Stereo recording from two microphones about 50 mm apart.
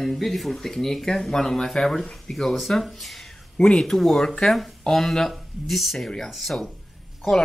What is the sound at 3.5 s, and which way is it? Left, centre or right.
Speech, centre.